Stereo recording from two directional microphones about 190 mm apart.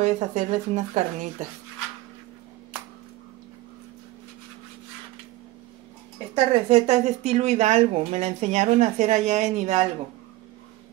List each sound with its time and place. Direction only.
0.0 s speech: 35° right (ahead or behind)
6.3 s speech: 30° right (ahead or behind)